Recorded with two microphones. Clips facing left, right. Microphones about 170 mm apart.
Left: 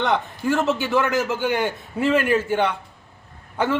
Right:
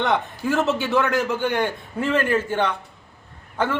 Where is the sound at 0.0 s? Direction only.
Centre (ahead or behind).